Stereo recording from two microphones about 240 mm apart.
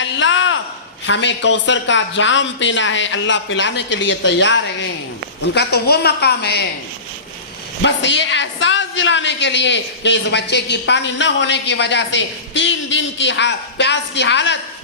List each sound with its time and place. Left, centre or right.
0.0 s a sound: left
1.0 s speech: left
7.8 s speech: left